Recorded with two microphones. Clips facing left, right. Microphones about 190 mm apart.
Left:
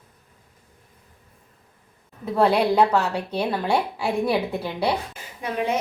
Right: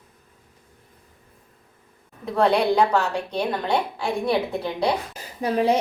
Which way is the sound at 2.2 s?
5° left (ahead or behind).